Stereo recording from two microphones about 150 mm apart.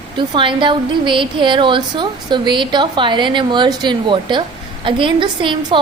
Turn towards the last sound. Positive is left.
turn(degrees=-30)  # may be behind; listen again after turning